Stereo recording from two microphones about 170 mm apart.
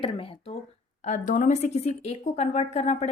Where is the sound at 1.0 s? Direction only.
45° left (ahead or behind).